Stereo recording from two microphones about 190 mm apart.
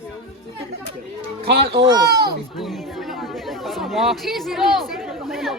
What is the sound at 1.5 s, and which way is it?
Speech, 55° right (ahead or behind).